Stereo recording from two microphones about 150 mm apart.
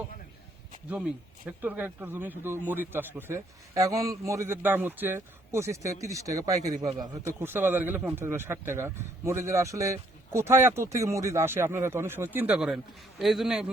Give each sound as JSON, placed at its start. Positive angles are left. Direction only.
{"t": 0.9, "sound": "speech", "side_deg": -10}
{"t": 6.7, "sound": "a man's voice", "side_deg": -50}
{"t": 6.9, "sound": "speech", "side_deg": -25}